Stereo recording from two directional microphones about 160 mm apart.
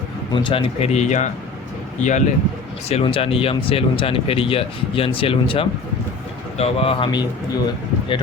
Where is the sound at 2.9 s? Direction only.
40° left (ahead or behind).